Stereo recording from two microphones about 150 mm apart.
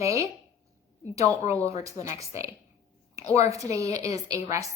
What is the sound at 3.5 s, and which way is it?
Speech, 20° right (ahead or behind).